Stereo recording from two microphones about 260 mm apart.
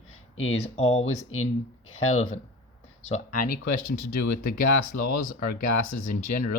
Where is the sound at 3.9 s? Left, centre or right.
Left.